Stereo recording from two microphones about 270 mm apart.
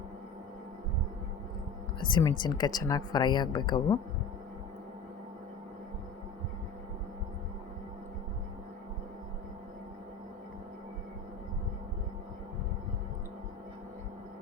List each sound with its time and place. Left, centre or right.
2.0 s speech: centre